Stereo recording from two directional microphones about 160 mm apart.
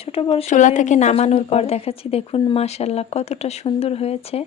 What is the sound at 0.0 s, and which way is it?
Speech, 35° left (ahead or behind).